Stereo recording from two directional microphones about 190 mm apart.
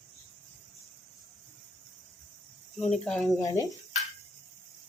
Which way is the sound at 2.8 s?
5° left (ahead or behind).